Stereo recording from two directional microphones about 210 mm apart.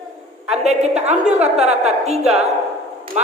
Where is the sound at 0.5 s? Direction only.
30° right (ahead or behind).